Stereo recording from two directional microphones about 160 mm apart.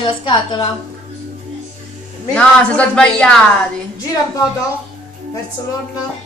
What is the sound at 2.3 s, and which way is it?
Speech, 5° left (ahead or behind).